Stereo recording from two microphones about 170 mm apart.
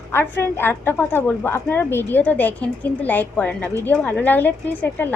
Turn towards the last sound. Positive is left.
turn(degrees=10)  # may be behind; listen again after turning